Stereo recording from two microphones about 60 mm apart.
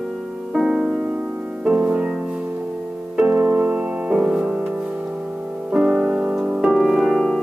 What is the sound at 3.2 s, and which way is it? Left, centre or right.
Music, right.